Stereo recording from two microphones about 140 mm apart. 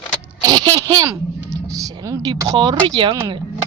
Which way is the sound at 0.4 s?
30° right (ahead or behind).